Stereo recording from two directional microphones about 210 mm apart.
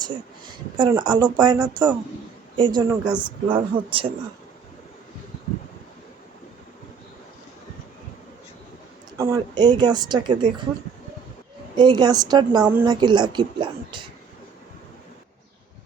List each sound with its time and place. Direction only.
0.0 s speech: 20° right (ahead or behind)
9.1 s speech: 15° right (ahead or behind)
11.8 s speech: 20° right (ahead or behind)